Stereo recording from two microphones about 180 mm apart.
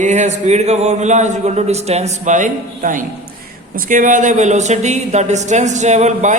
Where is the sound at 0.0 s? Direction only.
40° right (ahead or behind).